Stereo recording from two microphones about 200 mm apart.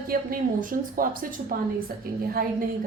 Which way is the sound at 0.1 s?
45° right (ahead or behind).